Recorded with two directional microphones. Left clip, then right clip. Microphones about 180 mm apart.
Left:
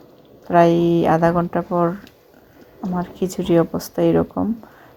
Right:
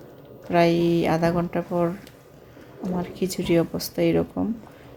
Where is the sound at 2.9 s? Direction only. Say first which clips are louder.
Left 4 dB; 10° left (ahead or behind).